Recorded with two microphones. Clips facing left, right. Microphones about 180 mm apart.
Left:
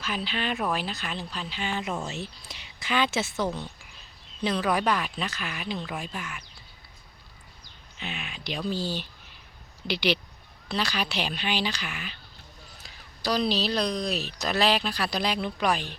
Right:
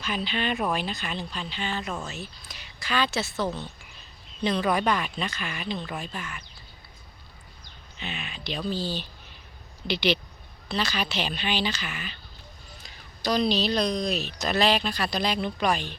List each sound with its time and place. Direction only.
0.0 s a woman's voice: 5° left (ahead or behind)
7.9 s a woman's voice: 5° left (ahead or behind)
10.7 s a woman's voice: 10° left (ahead or behind)